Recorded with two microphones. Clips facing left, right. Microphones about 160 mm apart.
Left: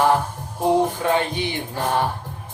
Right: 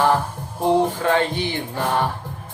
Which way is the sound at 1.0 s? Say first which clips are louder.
Right 1 dB; 15° left (ahead or behind).